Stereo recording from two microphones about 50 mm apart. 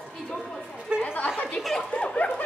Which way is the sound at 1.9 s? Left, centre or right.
Centre.